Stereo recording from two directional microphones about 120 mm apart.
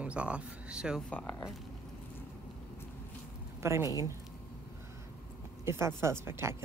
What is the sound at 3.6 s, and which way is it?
Speech, 25° right (ahead or behind).